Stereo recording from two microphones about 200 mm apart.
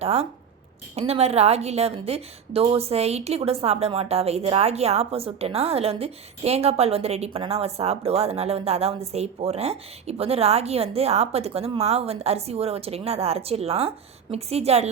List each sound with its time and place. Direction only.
0.0 s a woman's voice: 30° right (ahead or behind)